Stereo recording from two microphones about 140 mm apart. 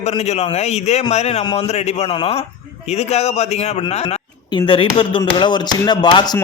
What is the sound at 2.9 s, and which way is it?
Speech, 50° left (ahead or behind).